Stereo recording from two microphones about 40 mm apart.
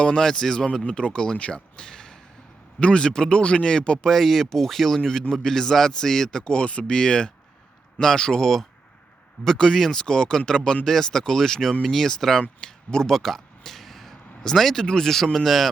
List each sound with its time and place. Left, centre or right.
0.2 s speech: centre
4.1 s speech: centre
6.4 s speech: left
13.1 s a sound: centre
14.5 s speech: centre